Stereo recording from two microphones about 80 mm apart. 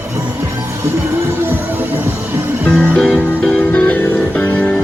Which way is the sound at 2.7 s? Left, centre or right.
Centre.